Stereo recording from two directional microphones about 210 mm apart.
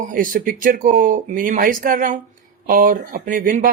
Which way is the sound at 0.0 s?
40° right (ahead or behind).